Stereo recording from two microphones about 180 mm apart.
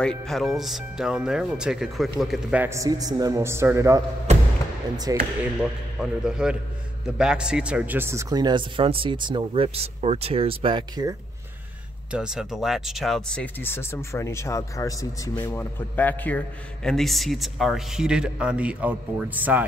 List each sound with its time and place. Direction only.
0.0 s speech: 5° left (ahead or behind); by 4.0 s 15° right (ahead or behind)
5.1 s a man's voice: 20° right (ahead or behind)
5.4 s a man's voice: 5° right (ahead or behind); by 11.1 s 25° right (ahead or behind)
12.1 s speech: 5° right (ahead or behind)